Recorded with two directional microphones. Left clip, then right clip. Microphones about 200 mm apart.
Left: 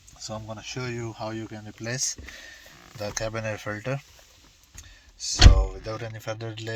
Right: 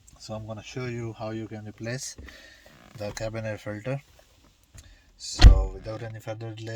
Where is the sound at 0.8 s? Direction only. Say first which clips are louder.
Left 1 dB; 20° right (ahead or behind).